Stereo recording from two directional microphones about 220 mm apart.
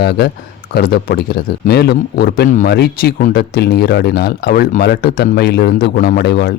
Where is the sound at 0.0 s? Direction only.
50° left (ahead or behind).